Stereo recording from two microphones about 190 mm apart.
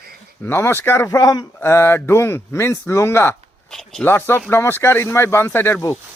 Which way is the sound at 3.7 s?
5° left (ahead or behind).